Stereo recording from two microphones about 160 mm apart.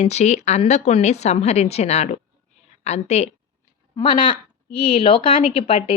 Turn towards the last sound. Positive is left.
turn(degrees=35)  # may be behind; listen again after turning